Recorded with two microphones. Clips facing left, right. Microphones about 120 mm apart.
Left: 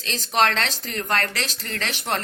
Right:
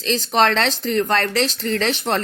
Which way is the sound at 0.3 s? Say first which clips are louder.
Right 3 dB; 30° right (ahead or behind).